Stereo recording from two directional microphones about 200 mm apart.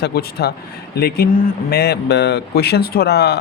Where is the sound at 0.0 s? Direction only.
50° left (ahead or behind).